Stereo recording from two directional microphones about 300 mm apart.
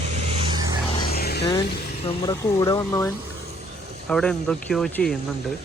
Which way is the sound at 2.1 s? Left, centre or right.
Centre.